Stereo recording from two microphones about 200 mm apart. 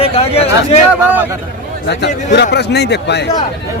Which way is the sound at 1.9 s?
60° left (ahead or behind).